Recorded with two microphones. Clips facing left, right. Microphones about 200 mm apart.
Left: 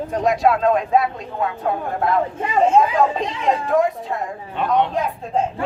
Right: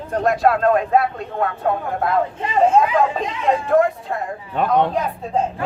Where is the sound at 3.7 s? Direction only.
Centre (ahead or behind).